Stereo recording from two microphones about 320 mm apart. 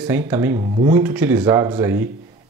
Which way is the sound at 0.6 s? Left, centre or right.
Centre.